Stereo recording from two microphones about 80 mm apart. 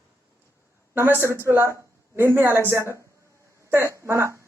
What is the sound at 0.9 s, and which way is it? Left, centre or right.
A man's voice, right.